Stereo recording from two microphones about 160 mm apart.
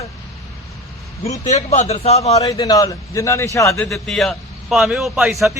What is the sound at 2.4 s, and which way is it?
Speech, 20° left (ahead or behind).